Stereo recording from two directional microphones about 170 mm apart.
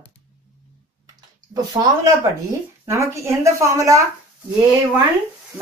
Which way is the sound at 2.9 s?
15° right (ahead or behind).